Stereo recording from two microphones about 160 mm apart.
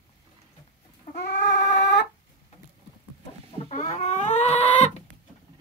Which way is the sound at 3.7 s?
50° left (ahead or behind).